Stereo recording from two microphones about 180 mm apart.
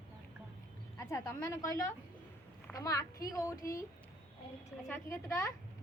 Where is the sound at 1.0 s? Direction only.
15° left (ahead or behind).